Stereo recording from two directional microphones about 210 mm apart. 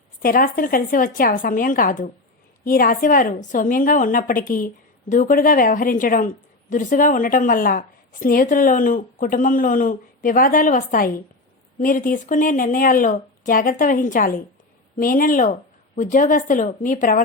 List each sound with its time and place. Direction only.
0.2 s a woman's voice: 40° left (ahead or behind)